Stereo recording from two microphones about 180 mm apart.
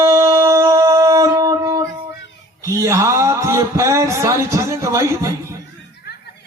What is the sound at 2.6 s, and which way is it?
Speech, 15° right (ahead or behind).